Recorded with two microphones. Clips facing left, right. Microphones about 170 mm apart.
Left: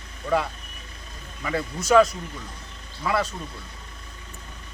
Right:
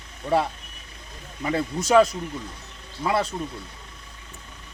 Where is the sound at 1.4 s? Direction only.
25° right (ahead or behind).